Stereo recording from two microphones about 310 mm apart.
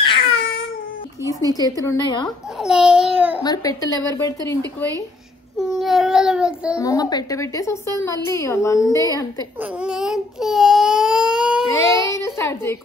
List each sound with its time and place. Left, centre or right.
0.0 s baby cry: centre
1.2 s a sound: centre
1.6 s a woman's voice: centre
2.2 s a child's voice: centre
3.4 s a woman's voice: centre
5.6 s a child's voice: centre
6.8 s a woman's voice: centre
9.6 s speech: centre
11.9 s a sound: centre
12.3 s speech: centre